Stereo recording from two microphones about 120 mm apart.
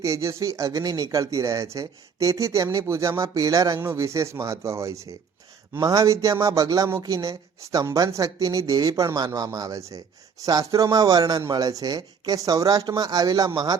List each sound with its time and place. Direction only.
0.0 s speech: 25° right (ahead or behind)